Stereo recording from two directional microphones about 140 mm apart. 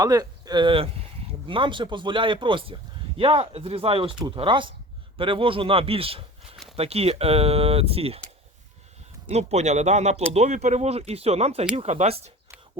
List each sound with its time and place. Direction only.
0.0 s speech: 25° right (ahead or behind); by 8.2 s 45° right (ahead or behind)
9.3 s speech: 50° right (ahead or behind)